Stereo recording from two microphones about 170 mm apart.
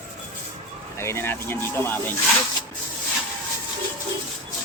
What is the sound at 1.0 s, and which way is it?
Speech, 15° left (ahead or behind).